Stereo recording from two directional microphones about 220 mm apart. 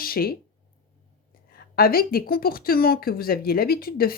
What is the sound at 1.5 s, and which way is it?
Speech, 40° left (ahead or behind).